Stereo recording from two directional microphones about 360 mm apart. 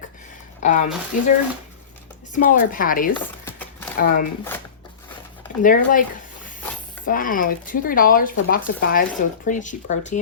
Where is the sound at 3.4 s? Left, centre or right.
Centre.